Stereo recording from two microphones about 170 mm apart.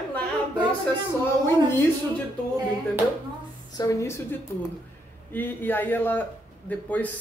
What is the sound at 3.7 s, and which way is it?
Speech, 15° left (ahead or behind).